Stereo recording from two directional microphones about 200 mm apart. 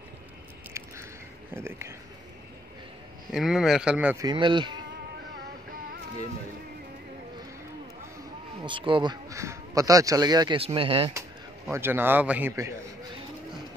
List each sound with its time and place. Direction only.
0.8 s a sound: 15° right (ahead or behind)
3.3 s speech: centre (ahead or behind)
4.3 s speech: 25° right (ahead or behind)
8.6 s speech: 25° right (ahead or behind)
11.7 s a man's voice: 10° right (ahead or behind)